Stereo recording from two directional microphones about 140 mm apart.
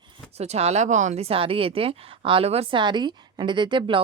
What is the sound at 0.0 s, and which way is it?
Speech, 45° right (ahead or behind).